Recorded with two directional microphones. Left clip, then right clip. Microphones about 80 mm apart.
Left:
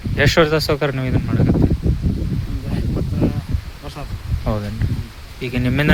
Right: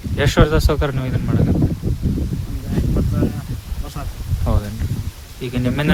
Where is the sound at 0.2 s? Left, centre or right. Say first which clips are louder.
Left 2 dB; right.